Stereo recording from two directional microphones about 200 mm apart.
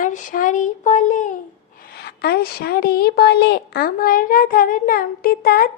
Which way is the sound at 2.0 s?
50° left (ahead or behind).